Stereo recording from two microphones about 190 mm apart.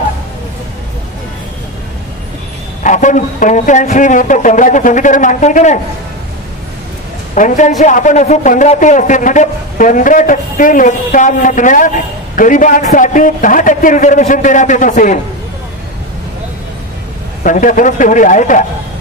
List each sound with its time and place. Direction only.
2.8 s a man's voice: 40° left (ahead or behind)
7.3 s a man's voice: 40° left (ahead or behind)
17.4 s a man's voice: 45° left (ahead or behind)